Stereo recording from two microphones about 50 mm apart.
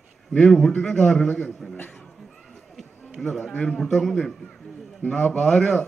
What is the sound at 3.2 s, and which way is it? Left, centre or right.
A man's voice, centre.